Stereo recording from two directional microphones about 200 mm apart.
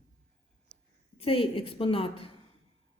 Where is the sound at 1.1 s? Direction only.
30° left (ahead or behind).